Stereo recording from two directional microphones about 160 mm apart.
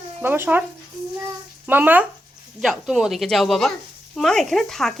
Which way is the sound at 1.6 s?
10° right (ahead or behind).